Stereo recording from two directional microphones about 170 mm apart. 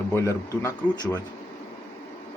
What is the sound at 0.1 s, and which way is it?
Speech, 15° left (ahead or behind).